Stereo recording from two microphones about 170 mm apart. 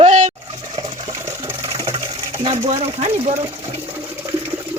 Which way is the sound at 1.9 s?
30° right (ahead or behind).